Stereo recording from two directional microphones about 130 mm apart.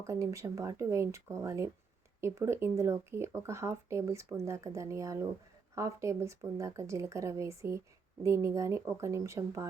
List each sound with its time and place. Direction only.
0.0 s speech: 25° right (ahead or behind)